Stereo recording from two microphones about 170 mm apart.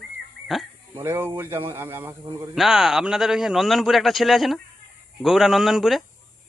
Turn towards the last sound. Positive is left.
turn(degrees=0)  # may be behind; listen again after turning